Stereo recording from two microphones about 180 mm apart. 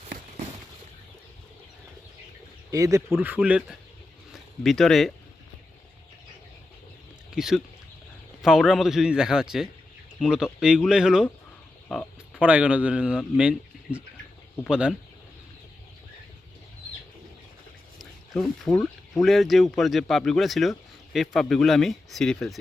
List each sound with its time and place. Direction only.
2.7 s a man's voice: 20° right (ahead or behind); by 5.1 s centre (ahead or behind)
7.3 s speech: centre (ahead or behind)
11.9 s oink: 5° left (ahead or behind)
12.4 s a man's voice: 10° right (ahead or behind)
18.0 s a sound: centre (ahead or behind)
19.2 s speech: centre (ahead or behind)